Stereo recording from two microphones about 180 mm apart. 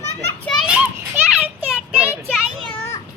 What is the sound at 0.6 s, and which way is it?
Children playing, 5° right (ahead or behind).